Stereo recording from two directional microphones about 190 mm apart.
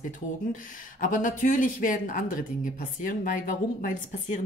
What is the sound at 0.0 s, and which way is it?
Speech, 45° left (ahead or behind).